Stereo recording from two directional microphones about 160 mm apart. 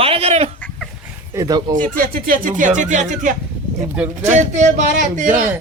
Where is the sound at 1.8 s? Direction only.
60° right (ahead or behind).